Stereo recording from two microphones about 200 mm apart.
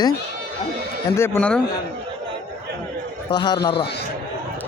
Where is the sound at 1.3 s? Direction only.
5° left (ahead or behind).